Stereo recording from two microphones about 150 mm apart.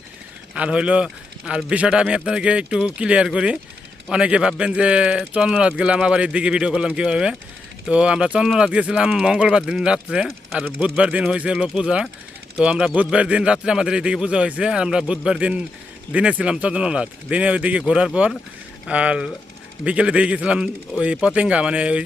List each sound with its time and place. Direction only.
0.5 s a man's voice: 5° right (ahead or behind)